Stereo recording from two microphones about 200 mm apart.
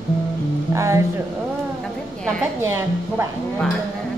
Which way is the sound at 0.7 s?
15° right (ahead or behind).